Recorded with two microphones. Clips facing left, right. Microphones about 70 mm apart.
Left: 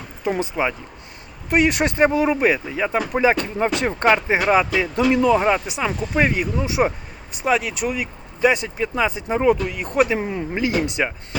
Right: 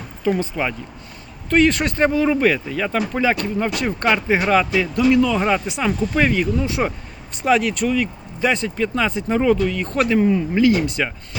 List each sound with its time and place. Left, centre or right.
0.3 s speech: centre
4.9 s speech: left
5.4 s speech: centre
7.4 s speech: centre
7.9 s speech: centre